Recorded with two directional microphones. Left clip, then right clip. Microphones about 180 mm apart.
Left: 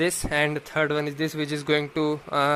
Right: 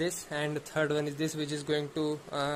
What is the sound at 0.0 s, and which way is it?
A man's voice, 15° left (ahead or behind).